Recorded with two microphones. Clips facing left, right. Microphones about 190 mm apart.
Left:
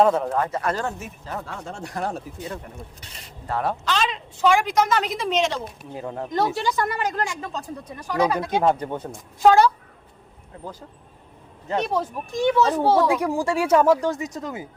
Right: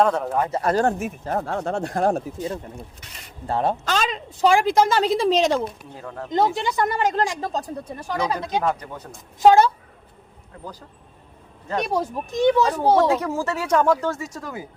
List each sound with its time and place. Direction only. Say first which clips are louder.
0.0 s speech: left 1 dB; 5° left (ahead or behind)
0.5 s speech: right 5 dB; 35° right (ahead or behind)
0.9 s speech: right 8 dB; 55° right (ahead or behind)
3.4 s a woman's voice: right 3 dB; 25° right (ahead or behind)
3.8 s a woman's voice: right 1 dB; 45° right (ahead or behind)
5.9 s speech: left 4 dB; 20° left (ahead or behind)
6.3 s a woman's voice: right 2 dB; 20° right (ahead or behind)
8.2 s speech: left 4 dB; 25° left (ahead or behind)
9.4 s a woman's voice: right 1 dB; 20° right (ahead or behind)
11.8 s a child's voice: right 2 dB; 10° right (ahead or behind)
13.1 s a woman's voice: even; 15° left (ahead or behind)